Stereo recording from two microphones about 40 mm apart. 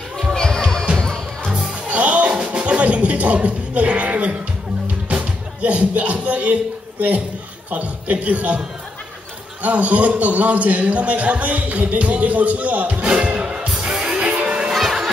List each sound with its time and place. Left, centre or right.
0.4 s music: centre
1.9 s music: right
7.7 s a man's voice: right
13.4 s music: right
14.3 s music: right
14.7 s music: centre